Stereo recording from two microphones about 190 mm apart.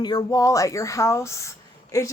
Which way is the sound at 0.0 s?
20° left (ahead or behind).